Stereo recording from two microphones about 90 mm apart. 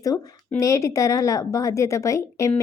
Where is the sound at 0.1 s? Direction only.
20° left (ahead or behind).